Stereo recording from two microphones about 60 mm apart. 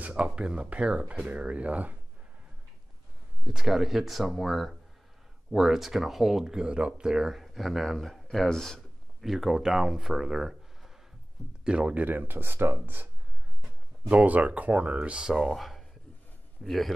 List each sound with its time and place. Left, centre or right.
0.0 s speech: right
3.4 s speech: centre
9.2 s speech: centre
12.0 s speech: right; by 15.3 s centre
15.3 s speech: centre